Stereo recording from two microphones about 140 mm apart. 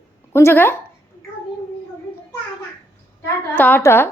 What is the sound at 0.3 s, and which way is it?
Speech, 15° left (ahead or behind).